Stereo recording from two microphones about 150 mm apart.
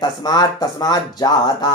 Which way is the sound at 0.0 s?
25° left (ahead or behind).